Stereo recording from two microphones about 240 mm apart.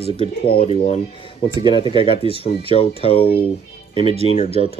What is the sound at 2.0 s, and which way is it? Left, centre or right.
Speech, left.